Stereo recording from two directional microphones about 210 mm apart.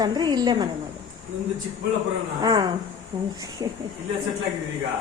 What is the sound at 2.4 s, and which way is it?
Speech, 20° right (ahead or behind).